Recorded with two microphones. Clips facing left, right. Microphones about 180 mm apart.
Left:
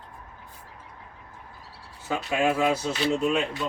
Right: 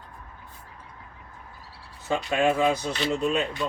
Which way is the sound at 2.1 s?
5° left (ahead or behind).